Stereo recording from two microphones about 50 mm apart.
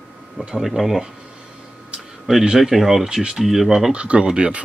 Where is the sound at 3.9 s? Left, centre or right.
Right.